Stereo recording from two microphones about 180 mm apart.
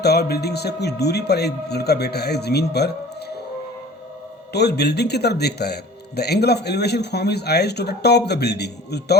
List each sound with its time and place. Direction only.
0.0 s speech: 65° left (ahead or behind)
4.5 s speech: 65° left (ahead or behind)